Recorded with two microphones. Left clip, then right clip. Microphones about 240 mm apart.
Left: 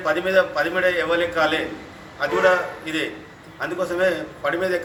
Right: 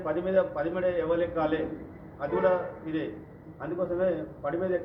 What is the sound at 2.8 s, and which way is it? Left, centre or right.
A man's voice, centre.